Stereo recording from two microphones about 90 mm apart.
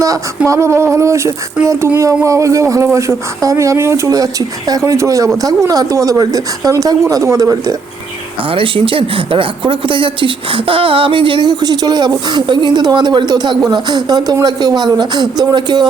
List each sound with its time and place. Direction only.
0.4 s speech: 35° right (ahead or behind)
8.4 s a man's voice: 75° right (ahead or behind); by 15.9 s 55° right (ahead or behind)